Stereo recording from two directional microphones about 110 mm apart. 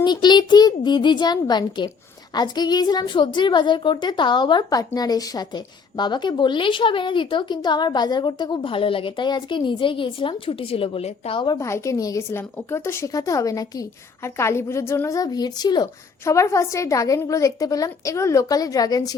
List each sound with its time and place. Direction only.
0.0 s a child's voice: 40° left (ahead or behind); by 11.4 s 55° left (ahead or behind)
11.6 s a woman's voice: 25° left (ahead or behind)
16.2 s a woman's voice: 25° left (ahead or behind)